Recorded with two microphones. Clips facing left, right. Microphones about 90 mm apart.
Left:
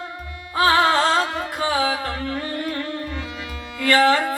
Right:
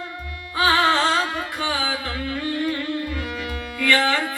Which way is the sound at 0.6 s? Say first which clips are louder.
Left 2 dB; 40° left (ahead or behind).